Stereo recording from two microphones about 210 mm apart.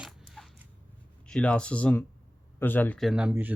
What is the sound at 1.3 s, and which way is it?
Speech, 5° left (ahead or behind).